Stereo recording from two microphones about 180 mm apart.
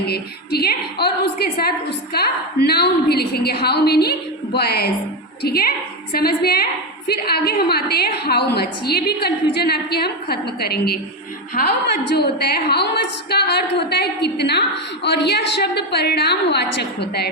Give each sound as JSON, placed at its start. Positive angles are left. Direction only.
{"t": 0.1, "sound": "a woman's voice", "side_deg": 60}